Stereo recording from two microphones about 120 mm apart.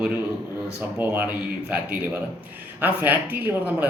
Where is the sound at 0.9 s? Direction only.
15° right (ahead or behind).